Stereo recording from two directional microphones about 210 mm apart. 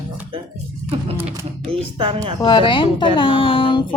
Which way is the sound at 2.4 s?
20° left (ahead or behind).